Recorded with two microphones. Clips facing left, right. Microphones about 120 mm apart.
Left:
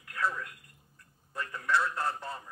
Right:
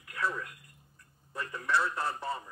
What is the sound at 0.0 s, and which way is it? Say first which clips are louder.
Telephone: left 1 dB; 20° right (ahead or behind).